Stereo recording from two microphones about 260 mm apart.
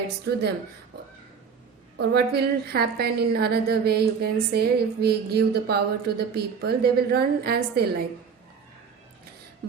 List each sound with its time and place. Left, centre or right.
0.3 s a woman's voice: right
2.0 s a woman's voice: right